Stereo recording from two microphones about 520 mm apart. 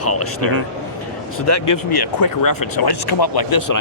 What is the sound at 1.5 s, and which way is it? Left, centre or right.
Speech, left.